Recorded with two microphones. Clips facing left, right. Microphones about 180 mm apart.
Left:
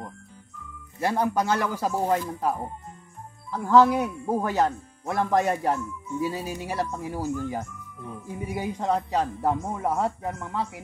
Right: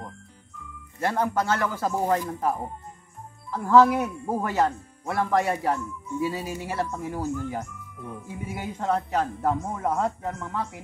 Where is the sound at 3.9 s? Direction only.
15° left (ahead or behind).